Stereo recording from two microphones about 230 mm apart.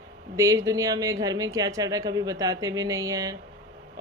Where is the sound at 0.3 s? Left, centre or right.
Centre.